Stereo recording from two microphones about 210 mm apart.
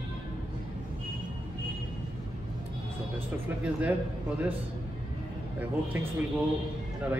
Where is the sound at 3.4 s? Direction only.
5° right (ahead or behind).